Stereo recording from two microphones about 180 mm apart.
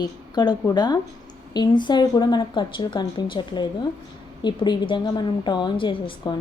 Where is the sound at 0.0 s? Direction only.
25° left (ahead or behind).